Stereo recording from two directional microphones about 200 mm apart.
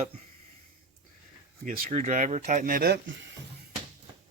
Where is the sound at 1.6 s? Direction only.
40° right (ahead or behind).